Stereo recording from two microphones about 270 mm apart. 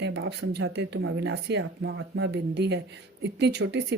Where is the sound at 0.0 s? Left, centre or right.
Right.